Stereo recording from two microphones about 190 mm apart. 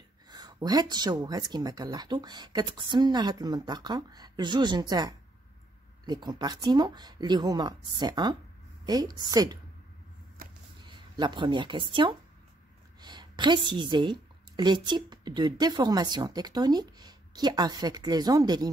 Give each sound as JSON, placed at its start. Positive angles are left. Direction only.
{"t": 0.3, "sound": "speech", "side_deg": -20}
{"t": 10.8, "sound": "a woman's voice", "side_deg": -25}